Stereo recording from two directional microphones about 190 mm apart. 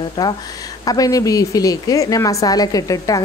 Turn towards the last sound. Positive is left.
turn(degrees=20)  # may be behind; listen again after turning